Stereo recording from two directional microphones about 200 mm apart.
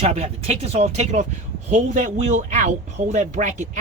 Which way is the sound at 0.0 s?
30° right (ahead or behind).